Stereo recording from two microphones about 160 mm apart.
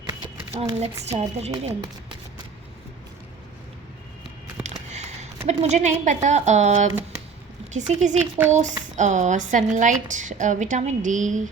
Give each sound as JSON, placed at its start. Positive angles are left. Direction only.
{"t": 0.6, "sound": "speech", "side_deg": -40}
{"t": 4.6, "sound": "a sound", "side_deg": -45}
{"t": 5.5, "sound": "a woman's voice", "side_deg": -45}